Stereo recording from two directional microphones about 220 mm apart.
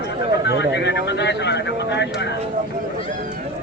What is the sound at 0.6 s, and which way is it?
Speech, 50° left (ahead or behind).